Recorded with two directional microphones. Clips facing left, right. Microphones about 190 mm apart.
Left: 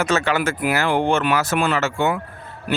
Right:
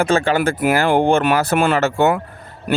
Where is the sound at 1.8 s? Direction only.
35° right (ahead or behind).